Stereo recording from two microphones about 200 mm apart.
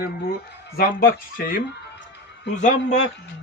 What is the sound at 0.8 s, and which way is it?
Speech, 45° left (ahead or behind).